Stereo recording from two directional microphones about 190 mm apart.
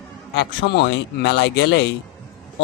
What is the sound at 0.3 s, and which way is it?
Speech, 60° left (ahead or behind).